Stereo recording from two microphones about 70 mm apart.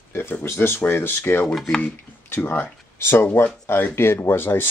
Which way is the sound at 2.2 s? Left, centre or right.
Left.